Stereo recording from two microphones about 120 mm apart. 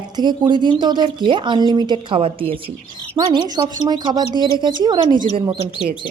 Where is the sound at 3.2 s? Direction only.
35° right (ahead or behind).